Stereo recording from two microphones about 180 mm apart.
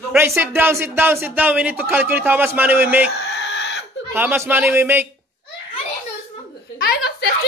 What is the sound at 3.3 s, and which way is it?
Chicken, 75° left (ahead or behind).